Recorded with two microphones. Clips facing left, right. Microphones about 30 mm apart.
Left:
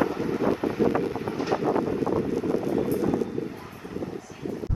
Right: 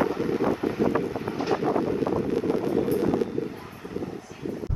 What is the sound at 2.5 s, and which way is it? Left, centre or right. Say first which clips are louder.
Vehicle: even; right.